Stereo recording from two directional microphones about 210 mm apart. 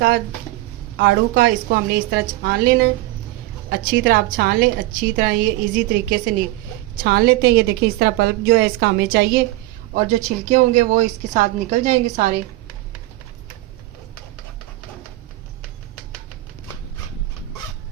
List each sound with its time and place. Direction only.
0.9 s a woman's voice: 45° right (ahead or behind)
10.2 s a woman's voice: 35° right (ahead or behind)